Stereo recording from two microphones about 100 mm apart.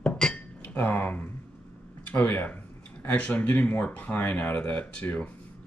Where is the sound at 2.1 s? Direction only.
15° left (ahead or behind).